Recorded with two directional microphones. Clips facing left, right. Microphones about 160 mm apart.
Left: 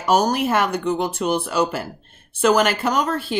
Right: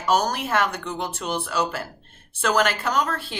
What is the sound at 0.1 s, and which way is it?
Speech, 15° left (ahead or behind).